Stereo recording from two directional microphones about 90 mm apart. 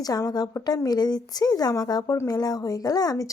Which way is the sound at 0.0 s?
45° left (ahead or behind).